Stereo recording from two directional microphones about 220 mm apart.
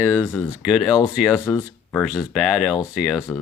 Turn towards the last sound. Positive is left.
turn(degrees=-5)  # may be behind; listen again after turning